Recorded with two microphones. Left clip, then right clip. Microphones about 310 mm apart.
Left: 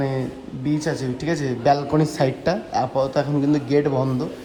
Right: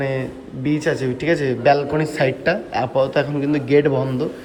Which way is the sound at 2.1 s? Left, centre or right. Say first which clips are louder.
Right 3 dB; centre.